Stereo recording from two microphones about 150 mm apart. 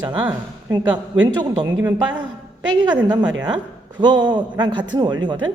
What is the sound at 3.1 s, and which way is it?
A man's voice, 30° right (ahead or behind).